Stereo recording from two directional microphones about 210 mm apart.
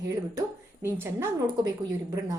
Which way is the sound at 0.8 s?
10° right (ahead or behind).